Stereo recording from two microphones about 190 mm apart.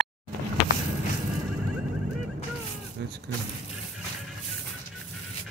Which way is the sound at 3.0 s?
65° right (ahead or behind).